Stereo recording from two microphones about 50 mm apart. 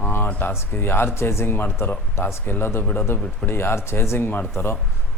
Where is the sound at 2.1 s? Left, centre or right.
Left.